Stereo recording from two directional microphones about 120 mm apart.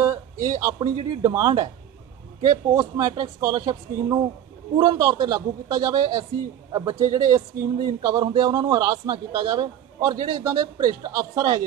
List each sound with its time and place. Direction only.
0.0 s speech: 25° right (ahead or behind)